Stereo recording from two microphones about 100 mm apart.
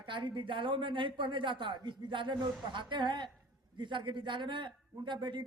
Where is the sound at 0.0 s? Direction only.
50° right (ahead or behind).